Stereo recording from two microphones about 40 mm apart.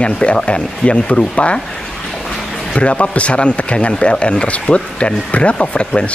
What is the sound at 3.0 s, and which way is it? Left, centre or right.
Speech, left.